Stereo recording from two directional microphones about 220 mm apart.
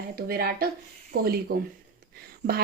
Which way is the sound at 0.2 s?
45° right (ahead or behind).